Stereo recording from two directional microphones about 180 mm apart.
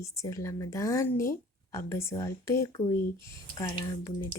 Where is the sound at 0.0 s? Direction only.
15° left (ahead or behind).